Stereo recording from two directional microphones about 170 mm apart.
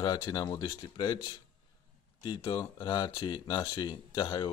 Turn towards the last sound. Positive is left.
turn(degrees=25)  # may be behind; listen again after turning